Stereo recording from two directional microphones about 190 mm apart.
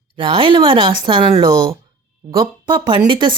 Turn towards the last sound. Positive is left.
turn(degrees=-25)  # may be behind; listen again after turning